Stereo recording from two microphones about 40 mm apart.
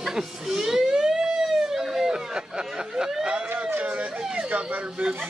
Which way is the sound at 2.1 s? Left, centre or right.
Centre.